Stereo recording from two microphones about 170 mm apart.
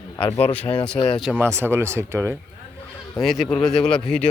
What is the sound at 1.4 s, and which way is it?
Speech, 15° right (ahead or behind).